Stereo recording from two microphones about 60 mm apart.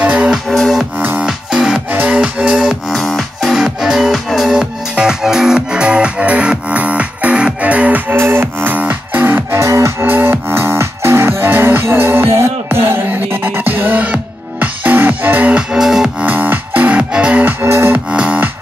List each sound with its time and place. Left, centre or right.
0.0 s music: right
0.5 s music: centre
1.2 s music: centre
1.9 s music: right
2.9 s music: centre
3.6 s music: centre; by 8.2 s right
8.2 s music: right
9.6 s music: right
10.0 s music: right
15.5 s music: centre
16.2 s music: right
17.5 s music: right
18.1 s music: centre